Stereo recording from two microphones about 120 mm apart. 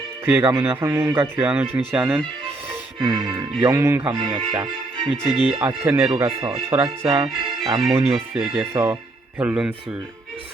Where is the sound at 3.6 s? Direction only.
25° right (ahead or behind).